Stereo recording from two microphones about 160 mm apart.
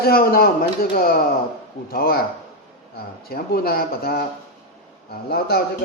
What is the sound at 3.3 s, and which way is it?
Speech, 70° left (ahead or behind).